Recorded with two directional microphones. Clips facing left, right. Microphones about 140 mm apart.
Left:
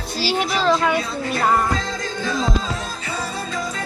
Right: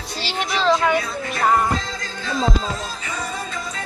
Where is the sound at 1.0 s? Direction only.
35° left (ahead or behind).